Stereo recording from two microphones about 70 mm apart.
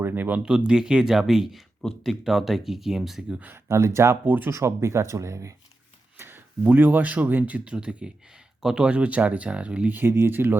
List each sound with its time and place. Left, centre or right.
0.0 s speech: right
0.7 s speech: centre
1.8 s speech: centre
2.2 s speech: centre
3.4 s speech: right
6.1 s speech: right; by 9.9 s centre
9.9 s speech: right